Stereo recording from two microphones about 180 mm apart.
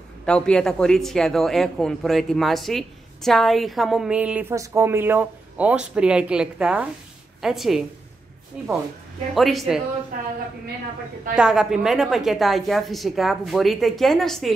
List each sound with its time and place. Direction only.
0.2 s speech: 5° left (ahead or behind)
10.1 s a woman's voice: 50° right (ahead or behind)
11.3 s speech: 5° right (ahead or behind)